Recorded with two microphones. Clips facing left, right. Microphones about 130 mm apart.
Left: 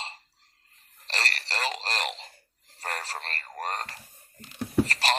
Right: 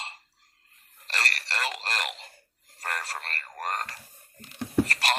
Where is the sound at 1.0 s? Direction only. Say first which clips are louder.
Even; 30° left (ahead or behind).